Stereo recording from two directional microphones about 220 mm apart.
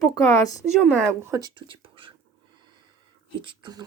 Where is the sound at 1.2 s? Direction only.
15° right (ahead or behind).